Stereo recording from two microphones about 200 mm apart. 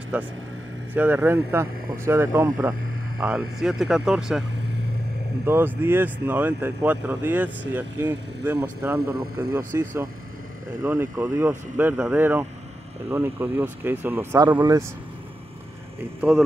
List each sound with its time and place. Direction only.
0.1 s speech: 10° right (ahead or behind)
3.2 s speech: 5° right (ahead or behind)
16.2 s speech: centre (ahead or behind)